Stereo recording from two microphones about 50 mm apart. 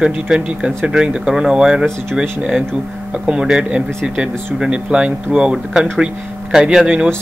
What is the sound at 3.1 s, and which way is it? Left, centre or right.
Speech, centre.